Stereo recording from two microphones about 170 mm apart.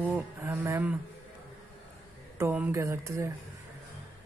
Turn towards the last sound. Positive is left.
turn(degrees=-15)  # may be behind; listen again after turning